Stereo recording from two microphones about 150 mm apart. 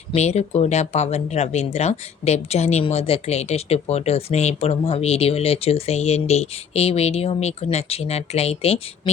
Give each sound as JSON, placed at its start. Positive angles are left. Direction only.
{"t": 0.1, "sound": "speech", "side_deg": 45}